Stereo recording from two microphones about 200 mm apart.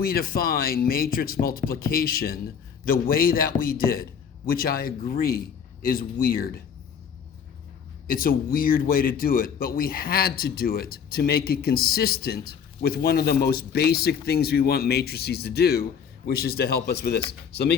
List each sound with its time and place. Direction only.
0.0 s speech: 50° left (ahead or behind)
8.0 s speech: 45° left (ahead or behind)